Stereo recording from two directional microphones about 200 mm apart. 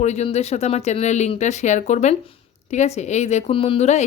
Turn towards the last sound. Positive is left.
turn(degrees=35)  # may be behind; listen again after turning